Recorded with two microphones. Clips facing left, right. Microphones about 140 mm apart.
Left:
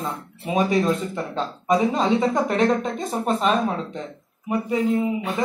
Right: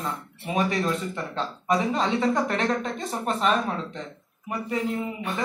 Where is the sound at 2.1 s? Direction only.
20° left (ahead or behind).